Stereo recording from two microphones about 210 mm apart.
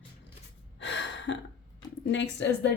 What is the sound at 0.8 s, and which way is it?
Gasp, 60° left (ahead or behind).